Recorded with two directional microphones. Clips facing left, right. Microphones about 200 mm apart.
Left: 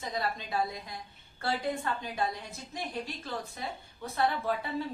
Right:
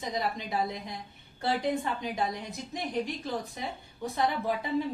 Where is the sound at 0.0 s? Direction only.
15° right (ahead or behind).